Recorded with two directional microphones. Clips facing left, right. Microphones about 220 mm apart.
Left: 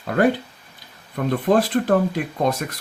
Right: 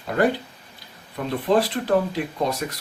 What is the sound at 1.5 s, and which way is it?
Speech, 50° left (ahead or behind).